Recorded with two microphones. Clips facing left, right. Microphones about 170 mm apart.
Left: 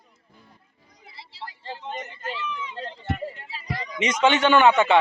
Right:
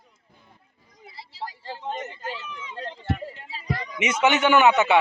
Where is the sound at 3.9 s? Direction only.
10° right (ahead or behind).